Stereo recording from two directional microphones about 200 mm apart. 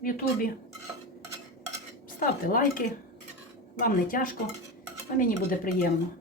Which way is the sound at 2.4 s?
45° left (ahead or behind).